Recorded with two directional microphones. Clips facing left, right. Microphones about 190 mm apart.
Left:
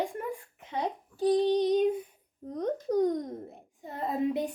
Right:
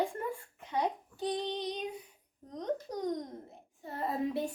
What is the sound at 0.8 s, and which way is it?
A child's voice, 35° left (ahead or behind).